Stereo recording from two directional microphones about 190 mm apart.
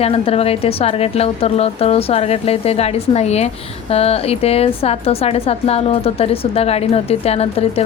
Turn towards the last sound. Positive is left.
turn(degrees=30)  # may be behind; listen again after turning